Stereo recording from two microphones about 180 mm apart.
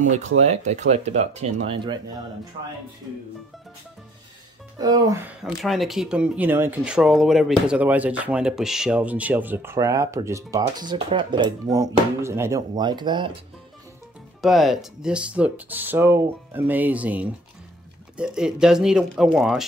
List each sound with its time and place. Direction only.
0.4 s speech: 40° right (ahead or behind)
4.7 s speech: 20° right (ahead or behind)
5.4 s speech: centre (ahead or behind); by 13.3 s 25° right (ahead or behind)
14.4 s speech: centre (ahead or behind)